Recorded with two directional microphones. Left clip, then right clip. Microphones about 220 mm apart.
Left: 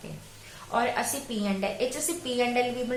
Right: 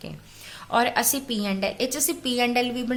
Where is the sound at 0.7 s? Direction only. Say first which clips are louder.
Right 5 dB; 45° right (ahead or behind).